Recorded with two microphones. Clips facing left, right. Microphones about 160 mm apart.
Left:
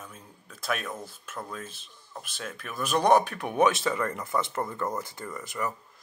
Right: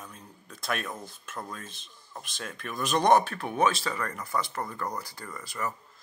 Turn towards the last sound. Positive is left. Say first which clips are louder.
# left 2 dB
turn(degrees=20)  # may be behind; listen again after turning